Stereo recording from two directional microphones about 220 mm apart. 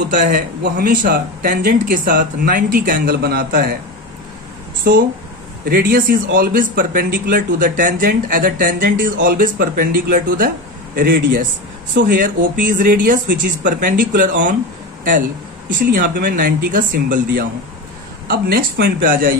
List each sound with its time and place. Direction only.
0.0 s speech: 45° right (ahead or behind)
5.7 s speech: 40° right (ahead or behind)
15.8 s speech: 40° right (ahead or behind)